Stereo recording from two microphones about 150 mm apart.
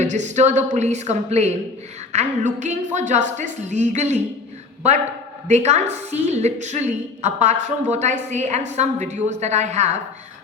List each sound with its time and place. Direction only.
0.0 s a woman's voice: 50° right (ahead or behind)
5.5 s a woman's voice: 50° right (ahead or behind)